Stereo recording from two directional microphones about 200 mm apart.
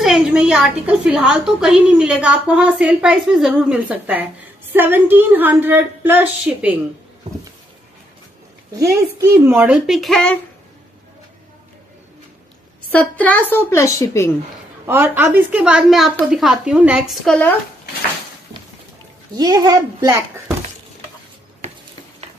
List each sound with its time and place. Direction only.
0.0 s a woman's voice: 5° right (ahead or behind)
8.7 s a woman's voice: 15° right (ahead or behind)
9.5 s a woman's voice: 5° right (ahead or behind)
12.9 s a woman's voice: 5° left (ahead or behind)
14.9 s a woman's voice: 10° right (ahead or behind)
19.3 s a child's voice: 20° right (ahead or behind)